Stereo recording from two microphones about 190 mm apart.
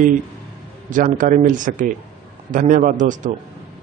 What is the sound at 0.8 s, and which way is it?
Speech, 45° right (ahead or behind).